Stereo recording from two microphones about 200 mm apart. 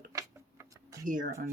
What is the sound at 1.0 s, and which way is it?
Speech, 40° right (ahead or behind).